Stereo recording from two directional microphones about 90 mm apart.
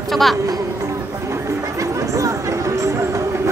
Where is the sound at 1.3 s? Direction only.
35° right (ahead or behind).